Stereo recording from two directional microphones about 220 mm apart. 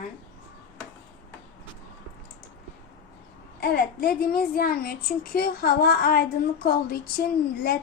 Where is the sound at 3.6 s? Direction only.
40° left (ahead or behind).